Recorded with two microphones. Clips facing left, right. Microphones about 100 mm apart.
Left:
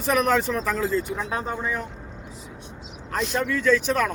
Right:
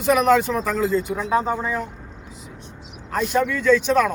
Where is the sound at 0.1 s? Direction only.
5° right (ahead or behind).